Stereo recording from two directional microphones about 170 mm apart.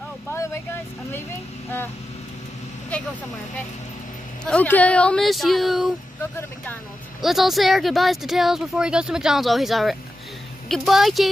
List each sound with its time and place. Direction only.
0.3 s vehicle: 15° left (ahead or behind)
1.1 s speech: 15° left (ahead or behind)
4.5 s speech: 10° left (ahead or behind)
7.2 s speech: centre (ahead or behind)